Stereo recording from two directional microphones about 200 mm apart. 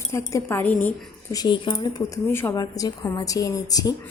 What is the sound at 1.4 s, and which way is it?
A woman's voice, 20° left (ahead or behind).